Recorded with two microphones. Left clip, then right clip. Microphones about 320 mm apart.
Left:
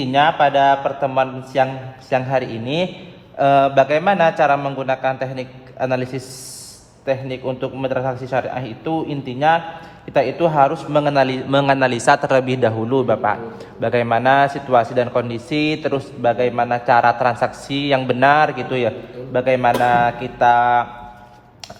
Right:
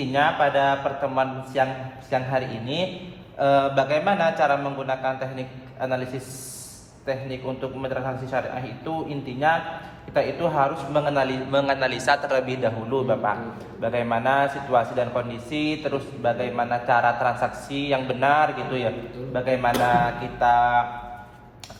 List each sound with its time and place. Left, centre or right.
0.1 s a man's voice: left